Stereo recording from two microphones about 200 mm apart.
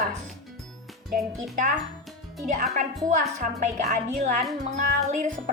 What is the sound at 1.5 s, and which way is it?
Speech, 40° right (ahead or behind).